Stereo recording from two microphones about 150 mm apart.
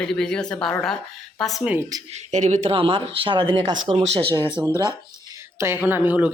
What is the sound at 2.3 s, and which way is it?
Speech, 50° right (ahead or behind).